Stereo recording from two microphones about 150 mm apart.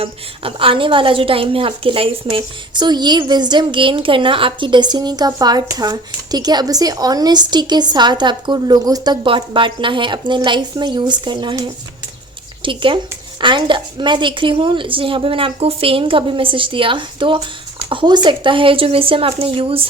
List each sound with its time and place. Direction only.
0.0 s a woman's voice: 35° right (ahead or behind)